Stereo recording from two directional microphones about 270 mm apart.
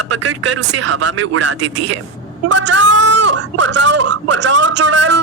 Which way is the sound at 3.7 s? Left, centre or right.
Right.